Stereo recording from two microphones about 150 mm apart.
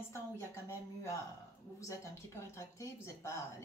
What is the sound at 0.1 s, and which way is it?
A woman's voice, 20° left (ahead or behind).